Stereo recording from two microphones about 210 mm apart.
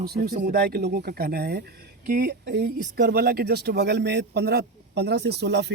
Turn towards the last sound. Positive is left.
turn(degrees=-55)  # may be behind; listen again after turning